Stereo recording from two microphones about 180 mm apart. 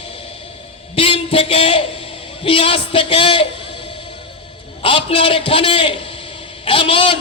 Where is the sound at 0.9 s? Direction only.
30° left (ahead or behind).